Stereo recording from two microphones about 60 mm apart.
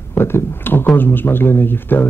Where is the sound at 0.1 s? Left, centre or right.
Left.